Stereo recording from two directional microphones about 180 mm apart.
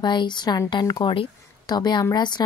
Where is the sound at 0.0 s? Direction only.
25° left (ahead or behind).